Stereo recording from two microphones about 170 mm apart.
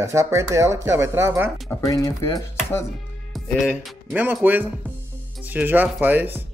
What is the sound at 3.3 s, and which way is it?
Speech, centre (ahead or behind).